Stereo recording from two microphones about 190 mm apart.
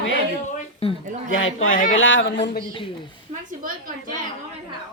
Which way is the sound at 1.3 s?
90° left.